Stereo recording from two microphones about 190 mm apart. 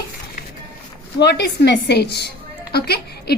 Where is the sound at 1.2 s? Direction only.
60° left (ahead or behind).